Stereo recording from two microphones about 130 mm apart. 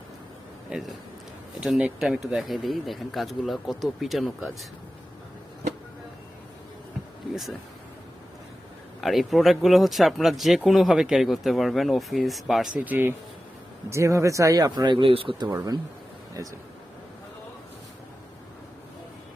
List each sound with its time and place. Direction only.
0.7 s speech: 5° right (ahead or behind)
9.0 s speech: centre (ahead or behind)
12.8 s speech: 15° right (ahead or behind); by 15.4 s 45° right (ahead or behind)
15.5 s speech: 30° right (ahead or behind)